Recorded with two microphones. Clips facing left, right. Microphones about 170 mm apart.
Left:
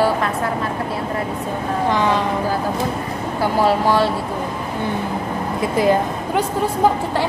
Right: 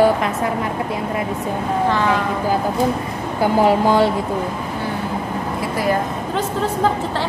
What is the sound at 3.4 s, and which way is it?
Speech, 20° right (ahead or behind).